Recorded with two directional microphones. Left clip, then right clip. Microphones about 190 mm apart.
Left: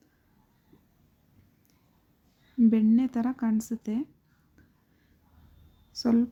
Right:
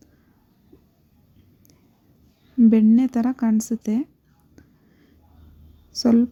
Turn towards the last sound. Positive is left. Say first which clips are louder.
# right 7 dB
turn(degrees=-20)  # may be behind; listen again after turning